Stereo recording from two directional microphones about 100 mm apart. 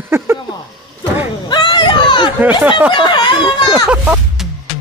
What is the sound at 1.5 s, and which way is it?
Children playing, 50° left (ahead or behind).